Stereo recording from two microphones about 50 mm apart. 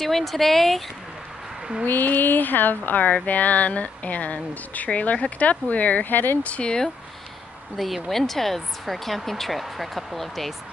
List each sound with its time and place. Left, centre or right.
0.0 s speech: centre
1.9 s speech: left
6.4 s speech: left
7.7 s speech: centre